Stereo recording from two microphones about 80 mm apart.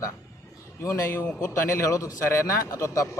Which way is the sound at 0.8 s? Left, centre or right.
Left.